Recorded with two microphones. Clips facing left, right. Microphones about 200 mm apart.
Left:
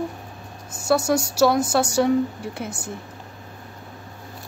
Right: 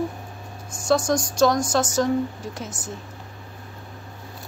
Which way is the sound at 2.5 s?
60° left (ahead or behind).